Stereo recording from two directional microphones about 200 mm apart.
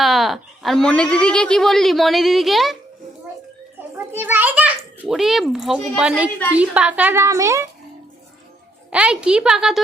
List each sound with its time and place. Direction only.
0.0 s a woman's voice: centre (ahead or behind)
4.2 s a woman's voice: 10° right (ahead or behind)
8.9 s a woman's voice: 5° right (ahead or behind)